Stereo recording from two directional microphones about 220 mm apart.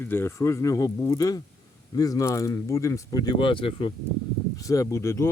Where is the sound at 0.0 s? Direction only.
10° left (ahead or behind).